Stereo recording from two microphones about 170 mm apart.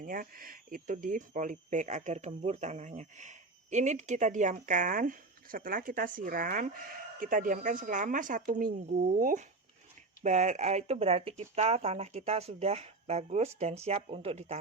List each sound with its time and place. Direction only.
0.0 s speech: 55° right (ahead or behind); by 14.6 s 40° right (ahead or behind)